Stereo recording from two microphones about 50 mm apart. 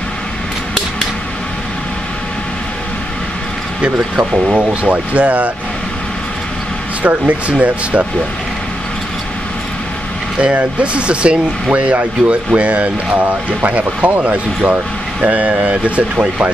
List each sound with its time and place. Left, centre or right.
4.5 s speech: right
7.0 s speech: right
10.4 s speech: right